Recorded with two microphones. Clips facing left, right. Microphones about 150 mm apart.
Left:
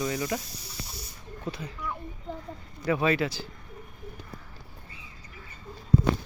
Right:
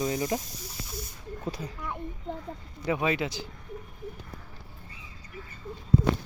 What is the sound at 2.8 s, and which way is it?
Speech, 15° right (ahead or behind).